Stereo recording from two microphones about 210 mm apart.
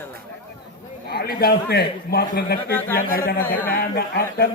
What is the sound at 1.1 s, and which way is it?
Speech, 45° left (ahead or behind).